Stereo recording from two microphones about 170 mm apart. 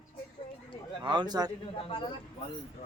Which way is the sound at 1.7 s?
30° left (ahead or behind).